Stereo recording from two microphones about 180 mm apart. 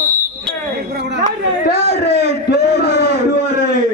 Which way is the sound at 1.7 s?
35° right (ahead or behind).